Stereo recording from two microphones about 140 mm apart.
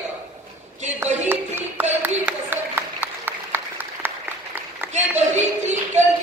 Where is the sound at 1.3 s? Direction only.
15° right (ahead or behind).